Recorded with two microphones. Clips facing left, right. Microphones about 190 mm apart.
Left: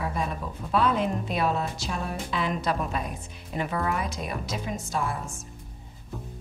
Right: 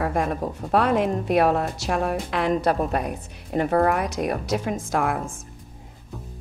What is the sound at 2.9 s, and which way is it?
A woman's voice, 60° right (ahead or behind).